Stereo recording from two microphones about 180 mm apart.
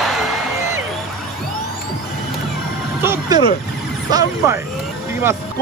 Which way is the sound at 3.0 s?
15° right (ahead or behind).